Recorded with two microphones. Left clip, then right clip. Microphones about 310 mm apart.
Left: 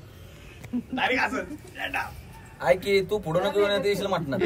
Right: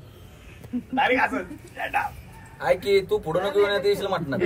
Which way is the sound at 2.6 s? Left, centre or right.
Centre.